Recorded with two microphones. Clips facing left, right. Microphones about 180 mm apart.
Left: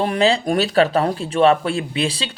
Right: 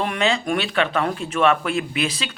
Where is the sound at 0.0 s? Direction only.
35° left (ahead or behind).